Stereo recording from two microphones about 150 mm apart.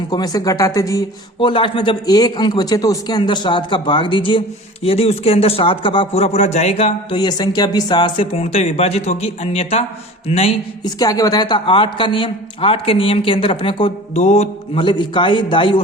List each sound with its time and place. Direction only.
0.1 s speech: 25° left (ahead or behind)
1.4 s a man's voice: 35° left (ahead or behind)
7.2 s a man's voice: 30° left (ahead or behind); by 9.8 s 45° left (ahead or behind)
10.2 s mantra: 40° left (ahead or behind)
10.8 s a man's voice: 25° left (ahead or behind)
14.1 s mantra: 50° left (ahead or behind)
14.8 s a man's voice: 30° left (ahead or behind)